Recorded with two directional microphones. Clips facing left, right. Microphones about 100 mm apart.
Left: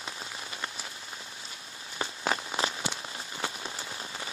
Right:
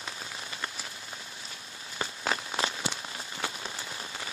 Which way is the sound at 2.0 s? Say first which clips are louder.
Left 1 dB; 25° left (ahead or behind).